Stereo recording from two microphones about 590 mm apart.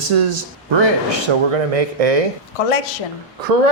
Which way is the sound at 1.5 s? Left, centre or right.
Right.